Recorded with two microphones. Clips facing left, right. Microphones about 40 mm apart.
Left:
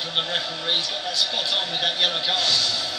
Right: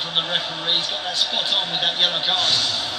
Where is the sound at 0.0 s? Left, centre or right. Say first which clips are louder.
Right 2 dB; right.